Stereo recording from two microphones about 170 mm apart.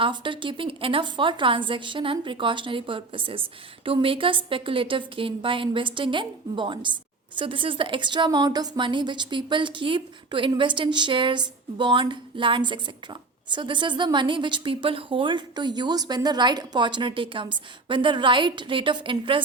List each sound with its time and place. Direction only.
0.0 s a woman's voice: 30° right (ahead or behind)